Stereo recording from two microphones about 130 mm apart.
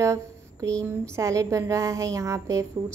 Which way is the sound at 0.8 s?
20° right (ahead or behind).